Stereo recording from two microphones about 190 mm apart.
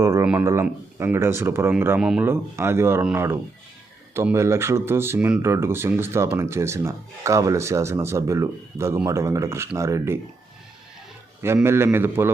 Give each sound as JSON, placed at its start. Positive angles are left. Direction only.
{"t": 0.0, "sound": "speech", "side_deg": -15}
{"t": 11.4, "sound": "speech", "side_deg": -15}